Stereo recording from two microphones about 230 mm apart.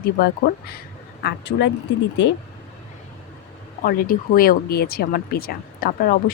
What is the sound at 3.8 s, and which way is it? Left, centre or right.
Speech, left.